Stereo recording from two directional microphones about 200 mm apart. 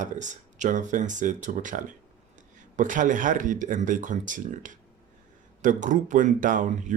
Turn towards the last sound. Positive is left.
turn(degrees=-40)  # may be behind; listen again after turning